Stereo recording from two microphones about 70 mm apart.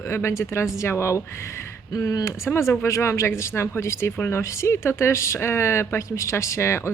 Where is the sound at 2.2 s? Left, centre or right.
Left.